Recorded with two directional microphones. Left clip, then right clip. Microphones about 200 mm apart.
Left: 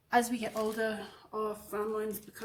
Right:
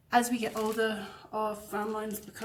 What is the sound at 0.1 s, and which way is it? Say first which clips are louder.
A woman's voice: right 2 dB; 20° left (ahead or behind).